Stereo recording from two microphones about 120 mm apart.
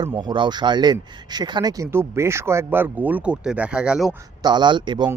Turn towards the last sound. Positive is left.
turn(degrees=-40)  # may be behind; listen again after turning